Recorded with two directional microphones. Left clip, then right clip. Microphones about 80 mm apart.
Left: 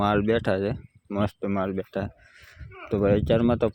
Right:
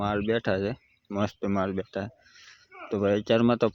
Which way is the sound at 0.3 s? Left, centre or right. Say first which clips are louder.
Left 3 dB; left.